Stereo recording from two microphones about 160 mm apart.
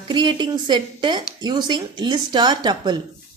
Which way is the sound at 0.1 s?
30° right (ahead or behind).